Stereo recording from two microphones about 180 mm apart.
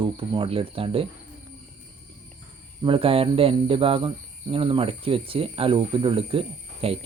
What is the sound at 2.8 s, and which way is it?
Speech, 30° right (ahead or behind).